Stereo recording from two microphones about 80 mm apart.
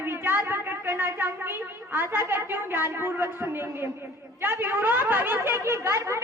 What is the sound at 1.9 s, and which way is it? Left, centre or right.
A woman's voice, right.